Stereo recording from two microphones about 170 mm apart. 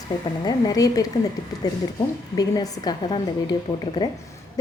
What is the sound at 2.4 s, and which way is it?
A woman's voice, 20° left (ahead or behind).